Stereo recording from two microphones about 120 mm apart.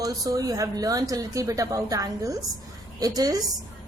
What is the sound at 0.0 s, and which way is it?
A woman's voice, 30° right (ahead or behind).